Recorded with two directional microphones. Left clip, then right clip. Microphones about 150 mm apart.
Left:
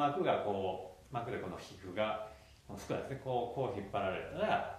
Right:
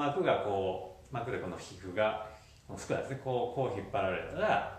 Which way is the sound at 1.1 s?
20° left (ahead or behind).